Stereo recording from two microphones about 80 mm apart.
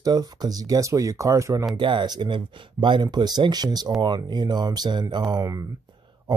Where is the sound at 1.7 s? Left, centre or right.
Right.